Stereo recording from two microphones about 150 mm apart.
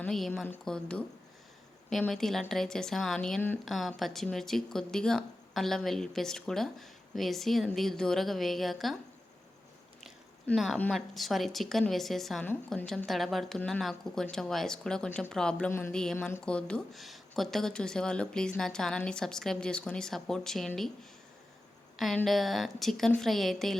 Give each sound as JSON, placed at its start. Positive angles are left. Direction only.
{"t": 0.1, "sound": "speech", "side_deg": 0}
{"t": 10.4, "sound": "speech", "side_deg": 0}
{"t": 15.7, "sound": "a sound", "side_deg": 15}
{"t": 16.5, "sound": "speech", "side_deg": 5}
{"t": 21.9, "sound": "speech", "side_deg": 0}